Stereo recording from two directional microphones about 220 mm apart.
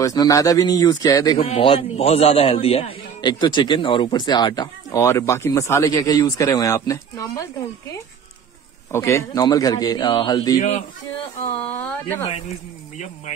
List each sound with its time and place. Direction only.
0.0 s a man's voice: 15° left (ahead or behind)
8.9 s a man's voice: 10° left (ahead or behind)
11.6 s a man's voice: 5° left (ahead or behind)